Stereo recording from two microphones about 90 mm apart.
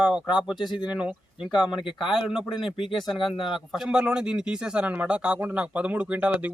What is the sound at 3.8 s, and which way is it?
A man's voice, 10° right (ahead or behind).